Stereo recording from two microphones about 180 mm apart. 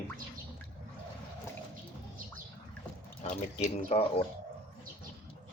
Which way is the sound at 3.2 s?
35° left (ahead or behind).